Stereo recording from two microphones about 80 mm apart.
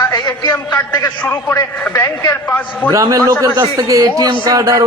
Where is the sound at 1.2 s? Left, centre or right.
Left.